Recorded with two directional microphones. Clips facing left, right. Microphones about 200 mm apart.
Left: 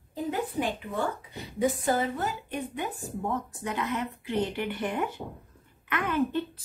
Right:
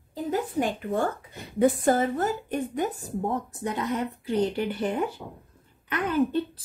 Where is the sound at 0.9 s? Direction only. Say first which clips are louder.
Right 4 dB; 50° right (ahead or behind); by 4.9 s 30° right (ahead or behind).